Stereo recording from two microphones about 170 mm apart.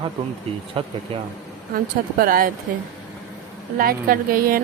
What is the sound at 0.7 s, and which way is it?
Speech, 35° right (ahead or behind).